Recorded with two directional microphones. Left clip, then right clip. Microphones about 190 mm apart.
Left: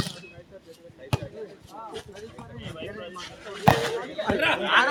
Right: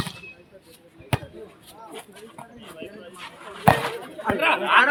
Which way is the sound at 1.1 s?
25° right (ahead or behind).